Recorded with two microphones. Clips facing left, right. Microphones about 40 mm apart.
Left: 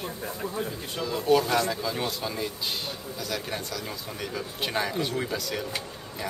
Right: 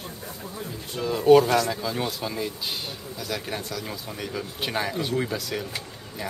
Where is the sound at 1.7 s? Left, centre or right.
Centre.